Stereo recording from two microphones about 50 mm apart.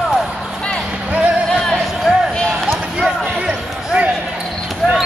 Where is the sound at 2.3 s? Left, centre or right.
Centre.